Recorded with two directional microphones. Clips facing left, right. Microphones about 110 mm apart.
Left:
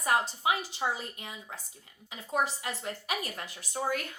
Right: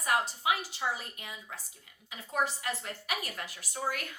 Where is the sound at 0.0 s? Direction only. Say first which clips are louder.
Left 2 dB; 30° left (ahead or behind).